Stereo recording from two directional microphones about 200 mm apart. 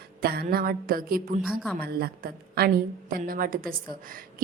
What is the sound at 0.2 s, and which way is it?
Speech, 50° right (ahead or behind).